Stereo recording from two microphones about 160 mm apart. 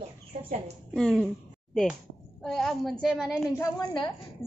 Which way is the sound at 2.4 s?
Centre (ahead or behind).